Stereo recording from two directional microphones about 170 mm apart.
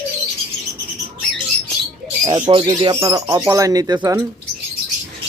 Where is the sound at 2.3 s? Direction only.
30° right (ahead or behind).